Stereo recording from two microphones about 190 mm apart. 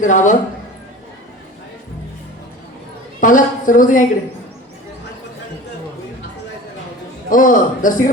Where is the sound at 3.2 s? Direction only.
45° left (ahead or behind).